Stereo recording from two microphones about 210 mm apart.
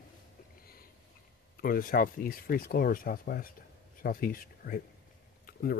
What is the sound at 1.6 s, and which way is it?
Speech, 45° left (ahead or behind).